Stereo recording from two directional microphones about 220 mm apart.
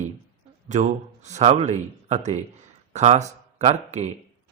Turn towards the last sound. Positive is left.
turn(degrees=-30)  # may be behind; listen again after turning